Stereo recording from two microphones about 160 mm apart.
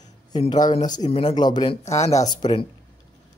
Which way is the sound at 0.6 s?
55° left (ahead or behind).